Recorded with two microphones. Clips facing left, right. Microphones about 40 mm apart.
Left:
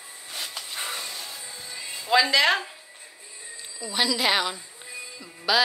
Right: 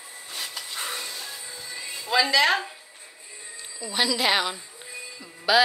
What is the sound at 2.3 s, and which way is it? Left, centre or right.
Speech, centre.